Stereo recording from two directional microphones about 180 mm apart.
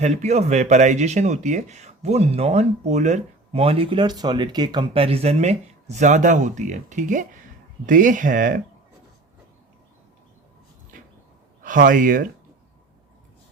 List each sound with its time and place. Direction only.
0.0 s speech: 40° right (ahead or behind)
11.6 s speech: 50° right (ahead or behind)